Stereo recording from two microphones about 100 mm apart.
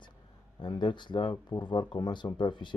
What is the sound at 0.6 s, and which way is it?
Speech, 50° left (ahead or behind).